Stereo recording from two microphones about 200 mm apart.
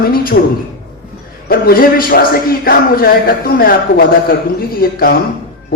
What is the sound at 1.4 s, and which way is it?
A man's voice, 45° left (ahead or behind).